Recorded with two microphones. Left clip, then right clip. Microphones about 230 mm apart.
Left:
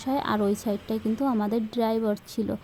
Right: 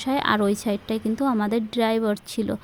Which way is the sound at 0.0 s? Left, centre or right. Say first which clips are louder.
Right 4 dB; right.